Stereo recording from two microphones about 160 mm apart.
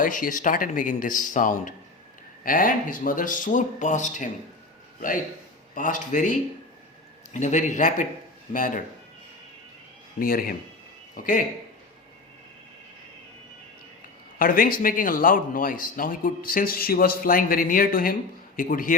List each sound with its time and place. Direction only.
0.0 s speech: 55° left (ahead or behind)
5.7 s speech: 55° left (ahead or behind)
10.2 s speech: 65° left (ahead or behind)
14.3 s speech: 60° left (ahead or behind)